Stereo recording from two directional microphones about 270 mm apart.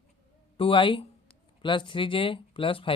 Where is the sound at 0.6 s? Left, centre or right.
Centre.